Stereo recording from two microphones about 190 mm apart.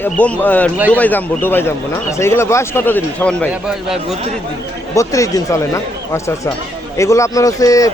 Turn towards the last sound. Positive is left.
turn(degrees=15)  # may be behind; listen again after turning